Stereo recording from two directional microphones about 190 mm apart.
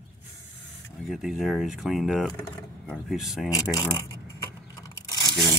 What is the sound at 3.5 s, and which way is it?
Speech, 20° left (ahead or behind).